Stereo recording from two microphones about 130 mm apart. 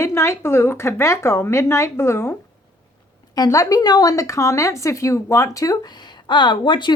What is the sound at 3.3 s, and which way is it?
Speech, 25° left (ahead or behind).